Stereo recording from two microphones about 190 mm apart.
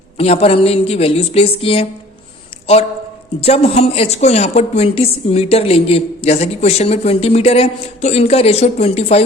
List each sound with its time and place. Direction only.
0.2 s a woman's voice: 30° left (ahead or behind)
3.4 s a woman's voice: 30° left (ahead or behind)